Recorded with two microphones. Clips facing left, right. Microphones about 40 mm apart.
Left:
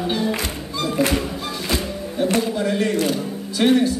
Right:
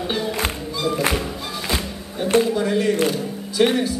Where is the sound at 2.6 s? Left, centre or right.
Centre.